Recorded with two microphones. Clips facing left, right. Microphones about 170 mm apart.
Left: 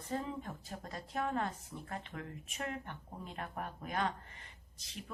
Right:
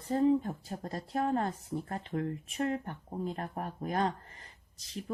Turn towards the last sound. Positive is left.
turn(degrees=-35)  # may be behind; listen again after turning